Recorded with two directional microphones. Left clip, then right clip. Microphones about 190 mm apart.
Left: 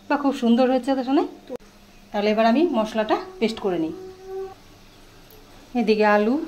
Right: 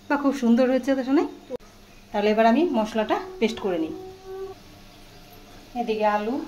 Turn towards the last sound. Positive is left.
turn(degrees=65)  # may be behind; listen again after turning